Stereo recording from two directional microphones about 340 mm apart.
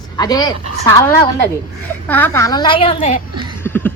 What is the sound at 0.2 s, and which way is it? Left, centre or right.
Speech, centre.